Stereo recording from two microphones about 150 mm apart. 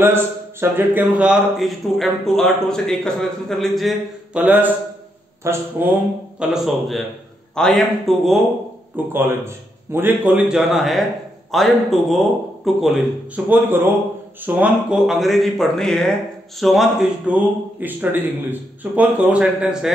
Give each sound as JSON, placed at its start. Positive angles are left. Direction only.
{"t": 0.0, "sound": "speech", "side_deg": -15}
{"t": 4.4, "sound": "a man's voice", "side_deg": -10}
{"t": 6.4, "sound": "speech", "side_deg": 0}
{"t": 8.9, "sound": "a man's voice", "side_deg": -15}
{"t": 13.5, "sound": "a man's voice", "side_deg": -15}